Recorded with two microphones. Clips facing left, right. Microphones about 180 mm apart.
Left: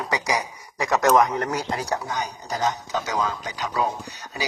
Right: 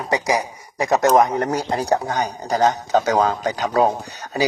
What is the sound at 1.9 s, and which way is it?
Speech, 60° right (ahead or behind).